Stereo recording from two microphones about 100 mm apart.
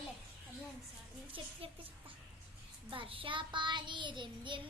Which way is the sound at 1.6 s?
65° right (ahead or behind).